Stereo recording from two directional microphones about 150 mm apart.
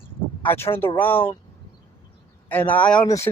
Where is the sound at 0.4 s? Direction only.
15° left (ahead or behind).